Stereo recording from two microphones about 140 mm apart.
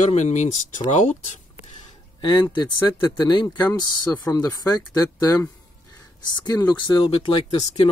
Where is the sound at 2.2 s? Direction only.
30° left (ahead or behind).